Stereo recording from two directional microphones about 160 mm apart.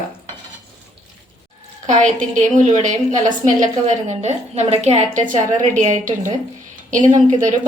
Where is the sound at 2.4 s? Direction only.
50° right (ahead or behind).